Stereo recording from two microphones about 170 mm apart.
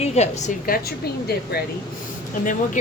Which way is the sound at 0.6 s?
60° left (ahead or behind).